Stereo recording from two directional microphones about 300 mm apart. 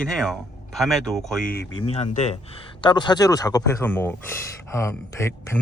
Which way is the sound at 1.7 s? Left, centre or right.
Centre.